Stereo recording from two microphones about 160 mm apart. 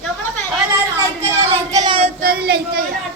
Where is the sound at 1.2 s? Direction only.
20° right (ahead or behind).